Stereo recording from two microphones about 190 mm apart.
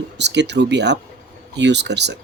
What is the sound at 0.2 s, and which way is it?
Speech, 65° right (ahead or behind).